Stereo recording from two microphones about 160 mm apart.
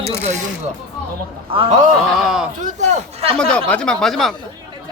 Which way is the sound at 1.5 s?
35° right (ahead or behind).